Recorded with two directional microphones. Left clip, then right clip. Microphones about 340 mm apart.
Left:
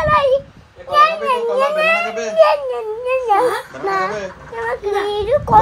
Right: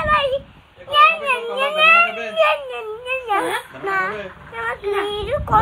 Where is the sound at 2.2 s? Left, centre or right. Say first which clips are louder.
Left 5 dB; centre.